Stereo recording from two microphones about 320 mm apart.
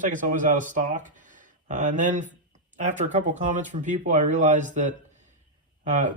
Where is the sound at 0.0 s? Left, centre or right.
Right.